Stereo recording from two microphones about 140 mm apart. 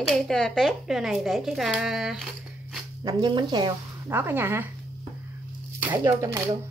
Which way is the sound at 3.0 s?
30° right (ahead or behind).